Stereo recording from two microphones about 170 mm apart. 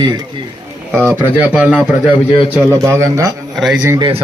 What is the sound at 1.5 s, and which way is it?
Speech, 5° right (ahead or behind).